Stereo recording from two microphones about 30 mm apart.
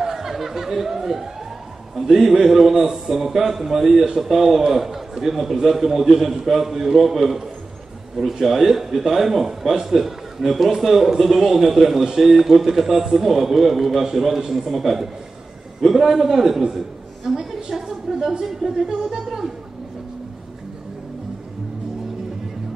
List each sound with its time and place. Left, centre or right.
0.0 s a sound: centre
2.0 s a man's voice: centre
14.4 s a man's voice: right
14.7 s a man's voice: centre
16.7 s a sound: centre
18.1 s a man's voice: centre
18.4 s a man's voice: centre